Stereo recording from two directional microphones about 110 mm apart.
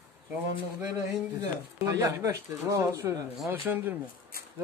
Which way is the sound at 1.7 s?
30° right (ahead or behind).